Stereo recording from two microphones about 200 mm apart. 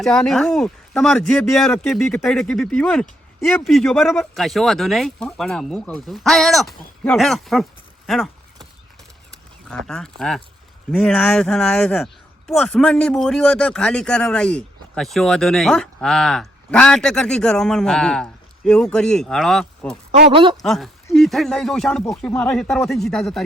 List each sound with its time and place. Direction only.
0.0 s speech: centre (ahead or behind)
9.6 s speech: 5° left (ahead or behind)
20.1 s speech: 45° right (ahead or behind)
20.3 s speech: 25° right (ahead or behind)
20.6 s speech: centre (ahead or behind)